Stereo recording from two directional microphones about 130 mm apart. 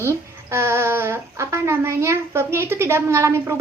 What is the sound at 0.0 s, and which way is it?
Speech, 20° right (ahead or behind).